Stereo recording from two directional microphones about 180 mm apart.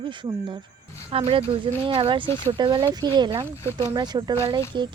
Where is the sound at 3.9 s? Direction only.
25° right (ahead or behind).